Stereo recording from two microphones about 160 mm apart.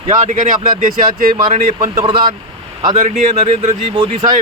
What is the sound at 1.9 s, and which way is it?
Speech, 30° right (ahead or behind).